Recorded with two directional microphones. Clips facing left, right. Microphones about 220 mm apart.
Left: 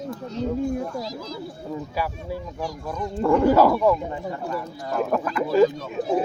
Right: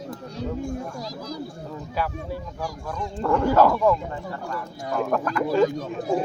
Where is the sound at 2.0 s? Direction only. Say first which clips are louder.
Right 3 dB; 10° left (ahead or behind).